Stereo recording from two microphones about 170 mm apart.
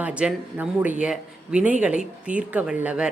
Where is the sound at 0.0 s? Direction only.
5° right (ahead or behind).